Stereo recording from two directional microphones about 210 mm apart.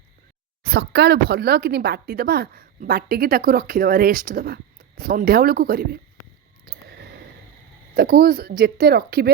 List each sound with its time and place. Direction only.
0.6 s speech: 50° right (ahead or behind)
6.7 s a sound: 50° right (ahead or behind)
7.9 s speech: 45° right (ahead or behind)